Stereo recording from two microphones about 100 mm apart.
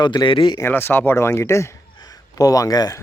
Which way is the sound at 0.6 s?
20° left (ahead or behind).